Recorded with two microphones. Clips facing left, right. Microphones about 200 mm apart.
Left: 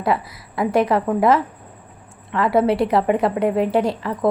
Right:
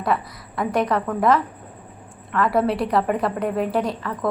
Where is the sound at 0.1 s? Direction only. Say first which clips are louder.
Left 2 dB; 25° left (ahead or behind).